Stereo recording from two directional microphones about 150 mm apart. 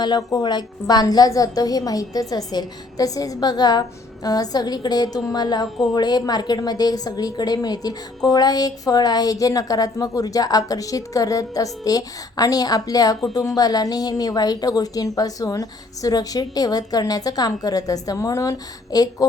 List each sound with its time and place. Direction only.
0.0 s a woman's voice: 25° left (ahead or behind)